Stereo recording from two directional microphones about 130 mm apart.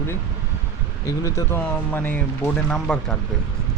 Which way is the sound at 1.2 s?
20° left (ahead or behind).